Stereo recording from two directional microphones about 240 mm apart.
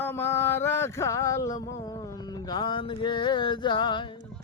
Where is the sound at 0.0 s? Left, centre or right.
Centre.